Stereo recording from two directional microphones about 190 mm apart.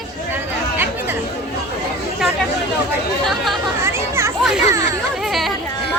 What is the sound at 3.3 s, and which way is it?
Chatter, centre (ahead or behind).